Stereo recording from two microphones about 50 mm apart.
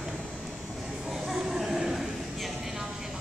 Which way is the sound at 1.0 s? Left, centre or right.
Centre.